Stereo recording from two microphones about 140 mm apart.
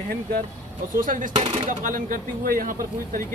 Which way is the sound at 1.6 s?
75° right (ahead or behind).